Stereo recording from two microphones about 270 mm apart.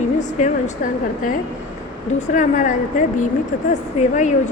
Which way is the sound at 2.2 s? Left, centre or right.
Left.